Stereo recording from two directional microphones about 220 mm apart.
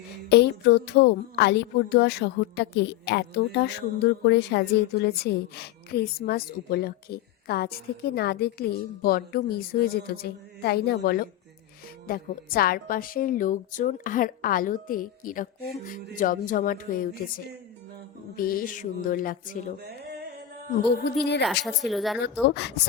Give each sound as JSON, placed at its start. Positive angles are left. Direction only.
{"t": 0.3, "sound": "a woman's voice", "side_deg": 50}
{"t": 21.4, "sound": "speech", "side_deg": 0}
{"t": 22.2, "sound": "a woman's voice", "side_deg": 50}